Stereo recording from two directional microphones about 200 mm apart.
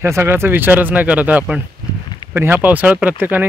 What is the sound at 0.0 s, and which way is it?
Speech, 10° right (ahead or behind).